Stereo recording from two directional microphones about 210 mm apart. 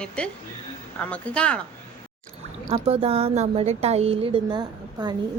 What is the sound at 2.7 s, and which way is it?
A woman's voice, 30° right (ahead or behind).